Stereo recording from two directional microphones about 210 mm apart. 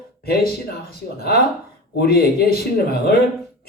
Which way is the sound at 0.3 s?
45° left (ahead or behind).